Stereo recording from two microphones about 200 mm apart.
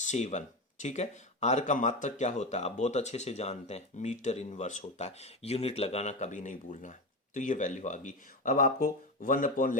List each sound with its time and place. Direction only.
0.0 s speech: 35° left (ahead or behind)